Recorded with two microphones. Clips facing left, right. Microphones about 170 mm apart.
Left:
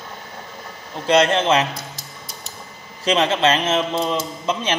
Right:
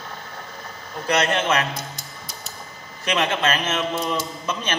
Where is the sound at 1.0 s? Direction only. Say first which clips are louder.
Left 5 dB; 30° left (ahead or behind).